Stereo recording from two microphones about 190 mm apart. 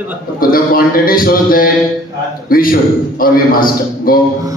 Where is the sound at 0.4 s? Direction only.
50° left (ahead or behind).